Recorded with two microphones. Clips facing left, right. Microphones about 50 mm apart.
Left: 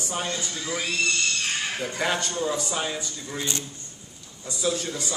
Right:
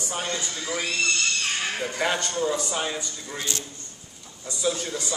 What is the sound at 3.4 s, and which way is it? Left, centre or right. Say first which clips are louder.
Speech: left 1 dB; left.